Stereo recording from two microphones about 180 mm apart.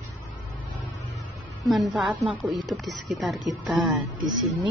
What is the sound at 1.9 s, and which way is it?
A woman's voice, 5° right (ahead or behind).